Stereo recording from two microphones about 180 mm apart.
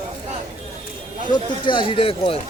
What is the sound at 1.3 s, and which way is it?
Speech, 25° left (ahead or behind).